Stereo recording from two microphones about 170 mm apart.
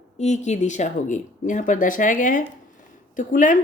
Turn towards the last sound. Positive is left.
turn(degrees=50)  # may be behind; listen again after turning